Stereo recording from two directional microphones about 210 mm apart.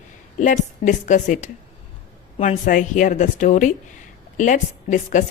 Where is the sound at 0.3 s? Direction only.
35° left (ahead or behind).